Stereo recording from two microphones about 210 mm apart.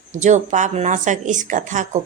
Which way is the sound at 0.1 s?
35° right (ahead or behind).